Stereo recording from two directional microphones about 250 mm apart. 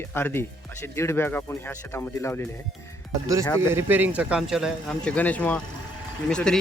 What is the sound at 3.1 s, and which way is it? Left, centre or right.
Speech, centre.